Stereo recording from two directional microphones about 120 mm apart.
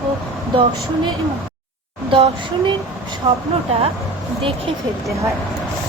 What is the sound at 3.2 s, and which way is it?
Speech, 40° right (ahead or behind).